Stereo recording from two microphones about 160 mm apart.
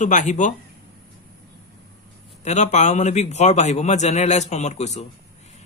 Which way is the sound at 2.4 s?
45° left (ahead or behind).